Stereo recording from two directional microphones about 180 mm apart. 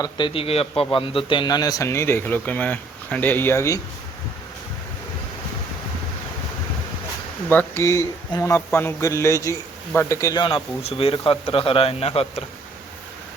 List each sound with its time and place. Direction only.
0.0 s a man's voice: 30° left (ahead or behind)
7.5 s a man's voice: 15° left (ahead or behind); by 12.5 s 35° left (ahead or behind)